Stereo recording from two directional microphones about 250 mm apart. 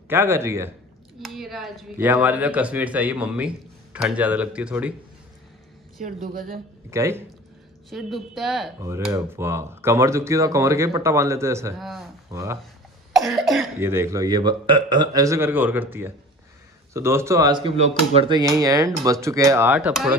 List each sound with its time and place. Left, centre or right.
0.1 s speech: centre
6.2 s speech: right
6.9 s speech: centre
7.9 s speech: centre
13.1 s speech: centre